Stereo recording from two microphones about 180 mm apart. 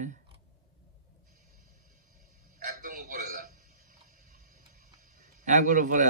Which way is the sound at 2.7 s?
50° right (ahead or behind).